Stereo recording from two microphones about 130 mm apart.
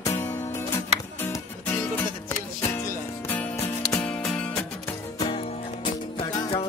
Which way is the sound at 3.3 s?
15° left (ahead or behind).